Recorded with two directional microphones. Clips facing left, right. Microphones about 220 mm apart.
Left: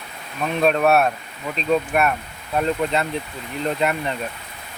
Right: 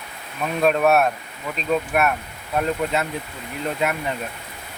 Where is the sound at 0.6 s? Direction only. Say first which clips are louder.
Even; 5° right (ahead or behind).